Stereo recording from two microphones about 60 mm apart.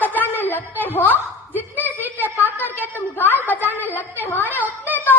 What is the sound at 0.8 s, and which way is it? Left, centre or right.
Speech, left.